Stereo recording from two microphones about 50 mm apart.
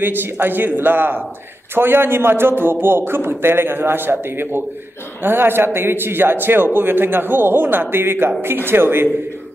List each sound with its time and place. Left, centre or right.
0.0 s a man's voice: right